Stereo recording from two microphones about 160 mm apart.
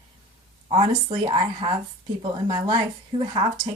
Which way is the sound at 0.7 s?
35° right (ahead or behind).